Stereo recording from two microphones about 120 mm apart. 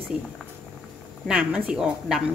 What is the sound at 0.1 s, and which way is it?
A woman's voice, 5° right (ahead or behind).